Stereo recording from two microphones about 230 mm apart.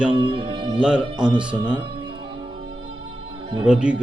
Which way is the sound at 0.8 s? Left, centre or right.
Centre.